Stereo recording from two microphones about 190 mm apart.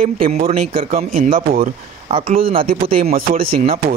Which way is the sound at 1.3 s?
50° right (ahead or behind).